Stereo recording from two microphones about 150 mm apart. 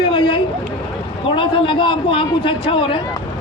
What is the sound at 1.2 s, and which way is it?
A man's voice, 35° left (ahead or behind).